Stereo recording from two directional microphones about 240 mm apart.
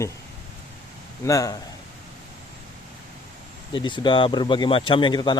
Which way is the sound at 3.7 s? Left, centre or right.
Centre.